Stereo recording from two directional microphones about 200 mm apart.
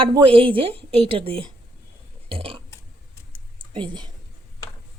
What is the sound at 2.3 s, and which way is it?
Burping, 25° right (ahead or behind).